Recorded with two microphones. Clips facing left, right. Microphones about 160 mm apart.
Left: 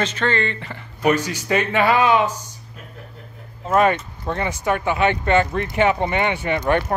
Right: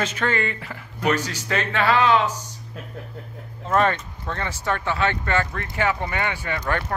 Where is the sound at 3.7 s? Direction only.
10° left (ahead or behind).